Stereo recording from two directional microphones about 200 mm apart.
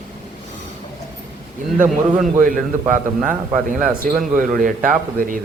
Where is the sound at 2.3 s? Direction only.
40° right (ahead or behind).